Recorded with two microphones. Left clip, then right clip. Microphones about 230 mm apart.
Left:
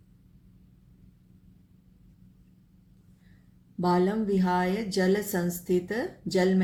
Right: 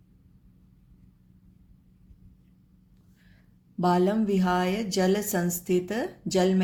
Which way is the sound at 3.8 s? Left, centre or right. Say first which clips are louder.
Right 2 dB; right.